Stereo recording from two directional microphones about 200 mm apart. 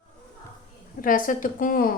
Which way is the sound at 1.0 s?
45° left (ahead or behind).